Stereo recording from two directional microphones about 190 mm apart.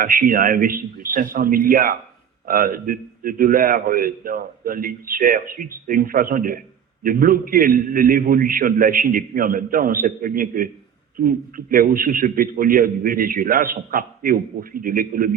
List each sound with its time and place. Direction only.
0.0 s a man's voice: 50° right (ahead or behind)